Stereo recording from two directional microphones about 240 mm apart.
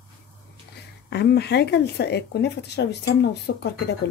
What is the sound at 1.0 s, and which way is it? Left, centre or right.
Speech, left.